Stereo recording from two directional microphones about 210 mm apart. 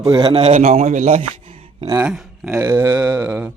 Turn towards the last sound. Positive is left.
turn(degrees=-5)  # may be behind; listen again after turning